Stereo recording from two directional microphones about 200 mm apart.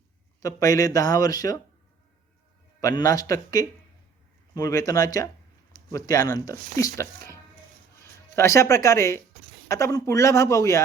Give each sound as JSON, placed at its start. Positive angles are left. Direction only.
{"t": 0.4, "sound": "speech", "side_deg": 15}
{"t": 2.8, "sound": "speech", "side_deg": 15}
{"t": 8.4, "sound": "speech", "side_deg": 15}